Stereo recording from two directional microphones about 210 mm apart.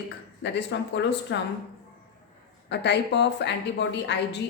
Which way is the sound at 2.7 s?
55° left (ahead or behind).